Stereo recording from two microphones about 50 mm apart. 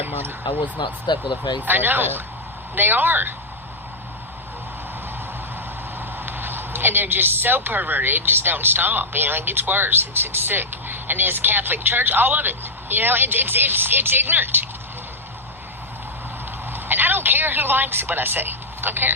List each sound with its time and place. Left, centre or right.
0.0 s a sound: right
1.6 s speech: right
6.0 s speech: right
16.7 s speech: right